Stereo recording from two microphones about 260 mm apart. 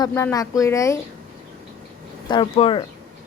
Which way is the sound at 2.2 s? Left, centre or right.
Centre.